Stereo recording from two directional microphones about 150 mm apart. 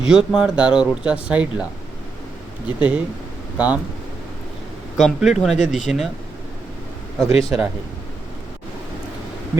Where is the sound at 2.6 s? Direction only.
10° right (ahead or behind).